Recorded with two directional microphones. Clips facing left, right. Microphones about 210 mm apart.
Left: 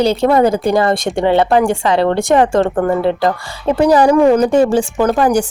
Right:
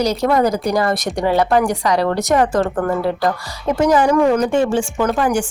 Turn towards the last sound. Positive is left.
turn(degrees=40)  # may be behind; listen again after turning